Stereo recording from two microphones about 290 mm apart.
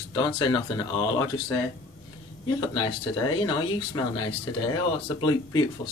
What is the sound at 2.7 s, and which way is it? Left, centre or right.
Speech, centre.